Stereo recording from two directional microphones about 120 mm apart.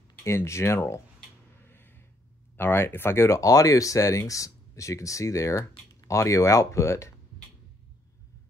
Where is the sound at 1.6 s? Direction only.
20° left (ahead or behind).